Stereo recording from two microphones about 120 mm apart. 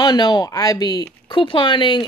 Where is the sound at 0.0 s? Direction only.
35° left (ahead or behind).